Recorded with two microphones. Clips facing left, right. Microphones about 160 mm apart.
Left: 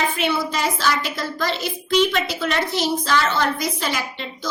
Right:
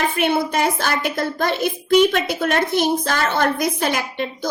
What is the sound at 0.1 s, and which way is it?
A woman's voice, 55° right (ahead or behind).